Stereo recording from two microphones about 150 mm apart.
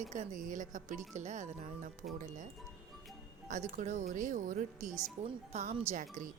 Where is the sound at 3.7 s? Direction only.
50° right (ahead or behind).